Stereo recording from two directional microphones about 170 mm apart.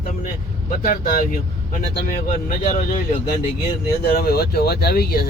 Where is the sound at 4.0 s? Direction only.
65° left (ahead or behind).